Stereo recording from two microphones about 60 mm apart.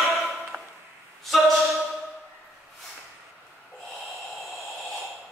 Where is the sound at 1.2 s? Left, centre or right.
Centre.